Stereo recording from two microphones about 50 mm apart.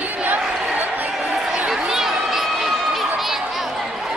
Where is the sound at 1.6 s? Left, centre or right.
Centre.